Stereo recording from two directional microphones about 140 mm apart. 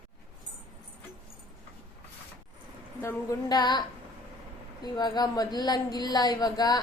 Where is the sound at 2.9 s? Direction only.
15° left (ahead or behind).